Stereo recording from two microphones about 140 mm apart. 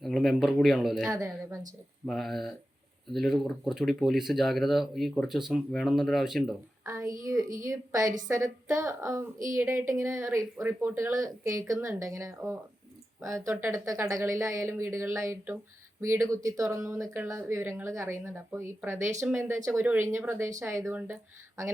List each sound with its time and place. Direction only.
0.0 s speech: centre (ahead or behind)
1.1 s speech: 20° right (ahead or behind)
2.0 s speech: centre (ahead or behind)
6.8 s speech: 20° right (ahead or behind)